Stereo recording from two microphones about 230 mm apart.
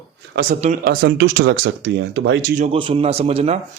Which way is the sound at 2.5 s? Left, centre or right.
Right.